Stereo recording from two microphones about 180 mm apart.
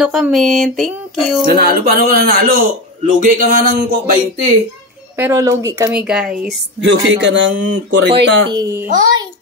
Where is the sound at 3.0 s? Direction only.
45° right (ahead or behind).